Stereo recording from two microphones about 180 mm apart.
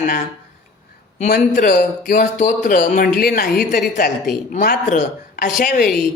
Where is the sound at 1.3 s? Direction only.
55° left (ahead or behind).